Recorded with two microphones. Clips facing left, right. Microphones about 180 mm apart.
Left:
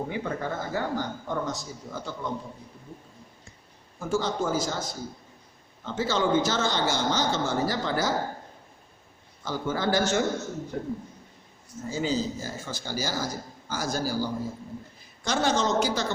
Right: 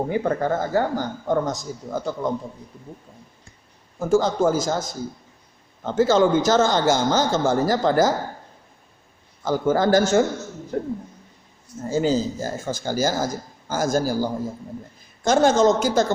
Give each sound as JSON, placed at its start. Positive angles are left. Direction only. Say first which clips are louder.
{"t": 0.1, "sound": "a man's voice", "louder": "right 9 dB", "side_deg": -50}
{"t": 4.0, "sound": "a man's voice", "louder": "right 8 dB", "side_deg": -45}
{"t": 9.4, "sound": "a man's voice", "louder": "right 9 dB", "side_deg": -45}